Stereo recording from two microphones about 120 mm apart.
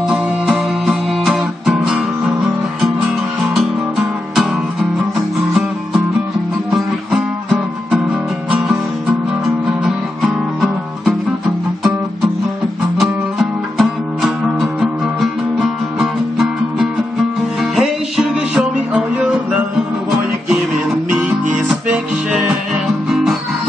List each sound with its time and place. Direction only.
0.1 s music: centre (ahead or behind)
3.5 s music: centre (ahead or behind)
13.0 s music: centre (ahead or behind)
21.8 s music: 5° right (ahead or behind)